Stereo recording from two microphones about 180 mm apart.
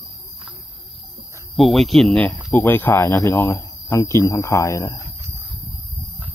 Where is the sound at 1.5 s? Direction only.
Centre (ahead or behind); by 5.0 s 15° left (ahead or behind).